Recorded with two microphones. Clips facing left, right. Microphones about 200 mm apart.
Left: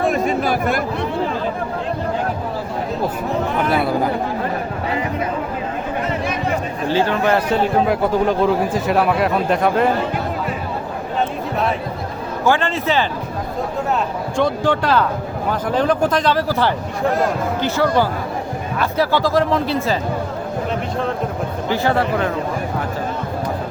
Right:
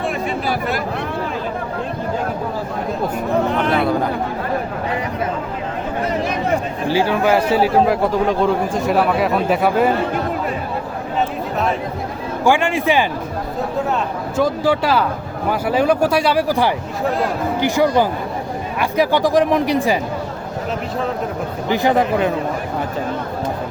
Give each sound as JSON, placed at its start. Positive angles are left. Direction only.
{"t": 0.0, "sound": "a sound", "side_deg": 45}
{"t": 3.7, "sound": "a sound", "side_deg": 5}
{"t": 6.8, "sound": "a man's voice", "side_deg": -10}
{"t": 12.5, "sound": "speech", "side_deg": -15}
{"t": 14.3, "sound": "speech", "side_deg": -5}
{"t": 21.7, "sound": "speech", "side_deg": -15}